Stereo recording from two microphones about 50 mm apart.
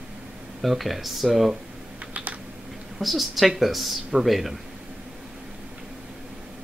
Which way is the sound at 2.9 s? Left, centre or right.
Centre.